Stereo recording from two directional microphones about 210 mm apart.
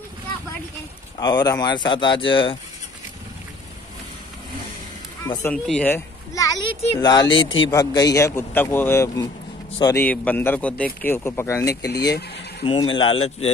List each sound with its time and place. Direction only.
1.1 s speech: 20° left (ahead or behind)
5.2 s a man's voice: 10° left (ahead or behind); by 13.5 s 25° left (ahead or behind)